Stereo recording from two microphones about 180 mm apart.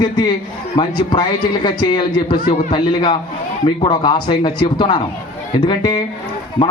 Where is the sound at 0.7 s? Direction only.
25° left (ahead or behind).